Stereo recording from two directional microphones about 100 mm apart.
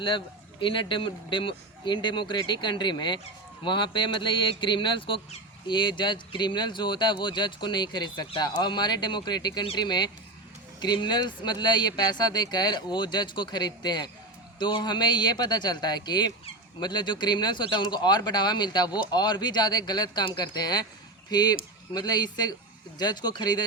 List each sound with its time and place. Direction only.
0.6 s speech: 55° left (ahead or behind)